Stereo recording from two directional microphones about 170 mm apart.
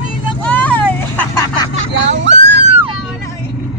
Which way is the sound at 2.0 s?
90° right.